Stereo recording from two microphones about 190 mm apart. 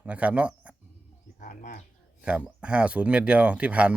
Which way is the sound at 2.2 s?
5° right (ahead or behind).